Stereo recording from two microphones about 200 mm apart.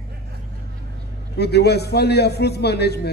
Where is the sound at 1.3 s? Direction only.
55° left (ahead or behind).